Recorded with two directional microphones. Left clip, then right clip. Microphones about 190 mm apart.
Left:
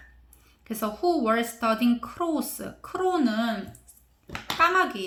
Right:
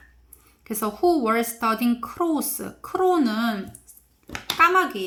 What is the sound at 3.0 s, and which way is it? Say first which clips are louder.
Speech: right 4 dB; 35° right (ahead or behind).